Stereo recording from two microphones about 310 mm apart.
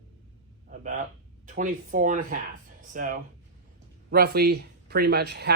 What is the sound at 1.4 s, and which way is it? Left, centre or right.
Speech, right.